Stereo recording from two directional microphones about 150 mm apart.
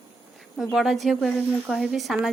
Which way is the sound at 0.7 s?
Centre (ahead or behind).